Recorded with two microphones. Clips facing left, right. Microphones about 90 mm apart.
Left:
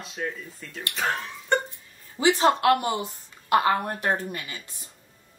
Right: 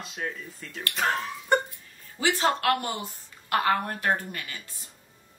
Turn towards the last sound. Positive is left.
turn(degrees=20)  # may be behind; listen again after turning